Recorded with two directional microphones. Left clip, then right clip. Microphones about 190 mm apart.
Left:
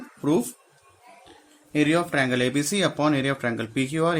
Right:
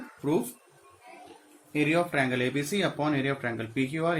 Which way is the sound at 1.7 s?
60° left (ahead or behind).